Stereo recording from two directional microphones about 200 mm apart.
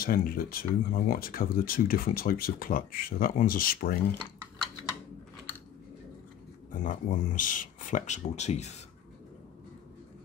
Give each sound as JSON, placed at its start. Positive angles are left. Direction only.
{"t": 0.0, "sound": "speech", "side_deg": 45}
{"t": 6.7, "sound": "speech", "side_deg": 40}